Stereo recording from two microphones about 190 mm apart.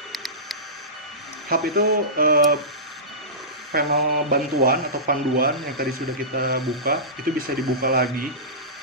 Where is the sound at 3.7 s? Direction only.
50° right (ahead or behind).